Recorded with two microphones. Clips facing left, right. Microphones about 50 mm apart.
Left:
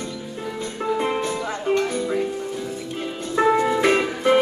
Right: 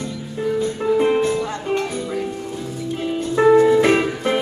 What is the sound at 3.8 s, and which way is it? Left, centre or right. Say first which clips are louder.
Music: right 3 dB; centre.